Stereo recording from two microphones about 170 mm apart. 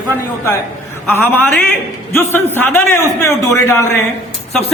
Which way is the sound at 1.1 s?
10° left (ahead or behind).